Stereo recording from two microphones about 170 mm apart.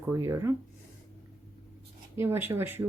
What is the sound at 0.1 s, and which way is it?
Speech, 15° right (ahead or behind).